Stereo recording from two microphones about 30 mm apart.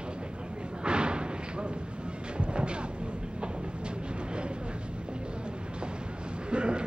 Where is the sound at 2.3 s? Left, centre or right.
Right.